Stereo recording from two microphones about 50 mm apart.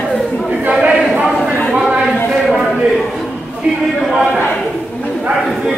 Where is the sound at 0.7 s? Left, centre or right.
Right.